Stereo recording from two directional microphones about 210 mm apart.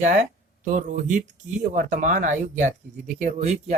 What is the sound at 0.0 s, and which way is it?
Speech, 35° right (ahead or behind).